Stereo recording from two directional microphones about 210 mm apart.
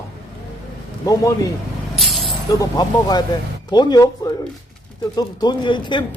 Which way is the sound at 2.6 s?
20° left (ahead or behind).